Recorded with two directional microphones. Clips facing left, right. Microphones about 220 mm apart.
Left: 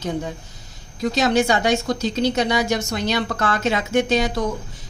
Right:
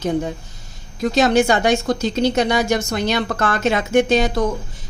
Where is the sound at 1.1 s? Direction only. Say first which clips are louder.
Right 3 dB; 50° right (ahead or behind).